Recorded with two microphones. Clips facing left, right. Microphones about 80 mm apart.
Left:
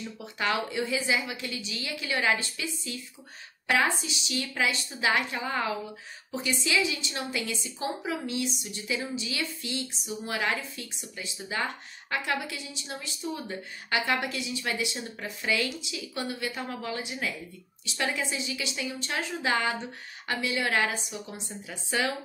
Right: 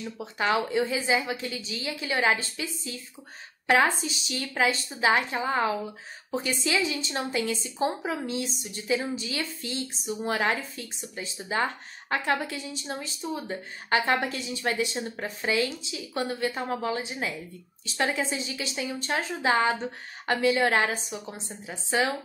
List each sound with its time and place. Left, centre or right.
0.2 s a woman's voice: right
15.5 s a woman's voice: right